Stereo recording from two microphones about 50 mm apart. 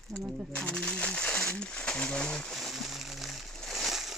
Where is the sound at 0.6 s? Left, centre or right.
Centre.